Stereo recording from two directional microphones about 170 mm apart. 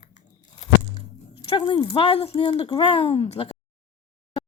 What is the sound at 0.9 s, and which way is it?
Speech, 30° left (ahead or behind).